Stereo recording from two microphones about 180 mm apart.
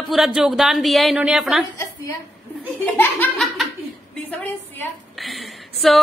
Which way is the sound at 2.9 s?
10° left (ahead or behind).